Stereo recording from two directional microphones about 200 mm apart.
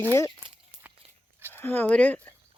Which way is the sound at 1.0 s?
30° right (ahead or behind).